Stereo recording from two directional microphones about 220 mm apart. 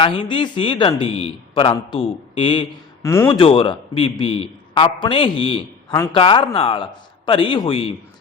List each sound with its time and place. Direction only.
0.0 s a man's voice: 20° left (ahead or behind)
3.3 s a man's voice: 25° left (ahead or behind)